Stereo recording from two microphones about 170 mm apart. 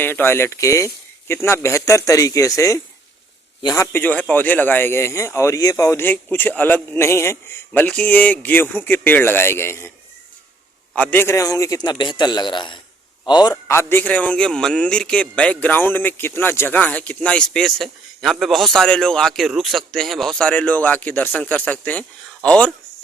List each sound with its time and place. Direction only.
0.0 s a man's voice: 10° left (ahead or behind)
3.9 s a man's voice: 10° left (ahead or behind)
10.9 s a man's voice: 10° left (ahead or behind)